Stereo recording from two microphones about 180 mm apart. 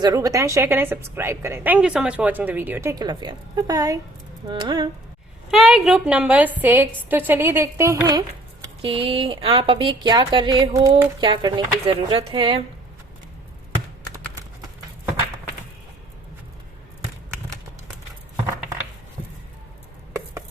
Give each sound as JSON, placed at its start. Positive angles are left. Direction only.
{"t": 0.0, "sound": "a woman's voice", "side_deg": -20}
{"t": 5.5, "sound": "a woman's voice", "side_deg": -5}
{"t": 8.8, "sound": "speech", "side_deg": -30}